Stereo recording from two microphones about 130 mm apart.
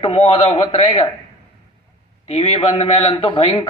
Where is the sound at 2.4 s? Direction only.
45° left (ahead or behind).